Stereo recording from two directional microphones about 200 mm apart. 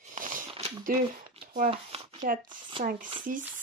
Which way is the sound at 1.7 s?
30° right (ahead or behind).